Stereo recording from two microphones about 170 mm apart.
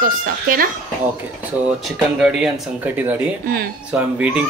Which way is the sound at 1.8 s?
5° right (ahead or behind).